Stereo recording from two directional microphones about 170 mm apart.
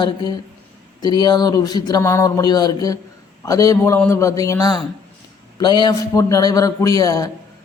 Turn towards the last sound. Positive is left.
turn(degrees=20)  # may be behind; listen again after turning